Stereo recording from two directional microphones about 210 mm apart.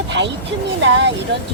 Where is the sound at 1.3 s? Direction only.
55° right (ahead or behind).